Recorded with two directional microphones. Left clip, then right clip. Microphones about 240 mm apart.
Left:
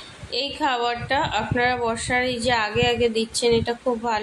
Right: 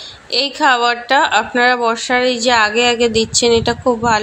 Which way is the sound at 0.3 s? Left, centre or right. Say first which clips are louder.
Right 10 dB; right.